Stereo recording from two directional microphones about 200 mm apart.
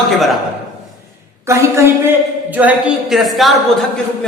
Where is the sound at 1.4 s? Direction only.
10° right (ahead or behind).